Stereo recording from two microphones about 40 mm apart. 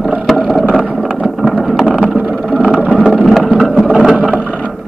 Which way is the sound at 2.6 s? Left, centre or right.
Right.